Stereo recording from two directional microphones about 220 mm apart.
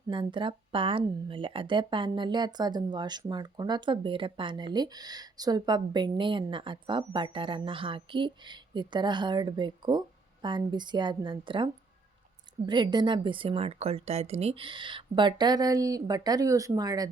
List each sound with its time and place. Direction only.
0.1 s speech: 20° right (ahead or behind)